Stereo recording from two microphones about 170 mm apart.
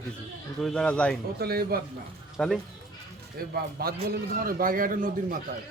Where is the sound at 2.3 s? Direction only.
5° left (ahead or behind).